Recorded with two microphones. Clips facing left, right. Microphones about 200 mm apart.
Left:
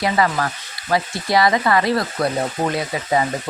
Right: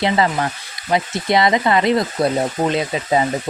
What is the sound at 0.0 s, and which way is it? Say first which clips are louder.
Speech: right 2 dB; 25° right (ahead or behind).